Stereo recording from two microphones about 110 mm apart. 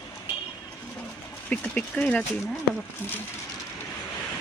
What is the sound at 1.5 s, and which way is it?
Speech, 10° left (ahead or behind).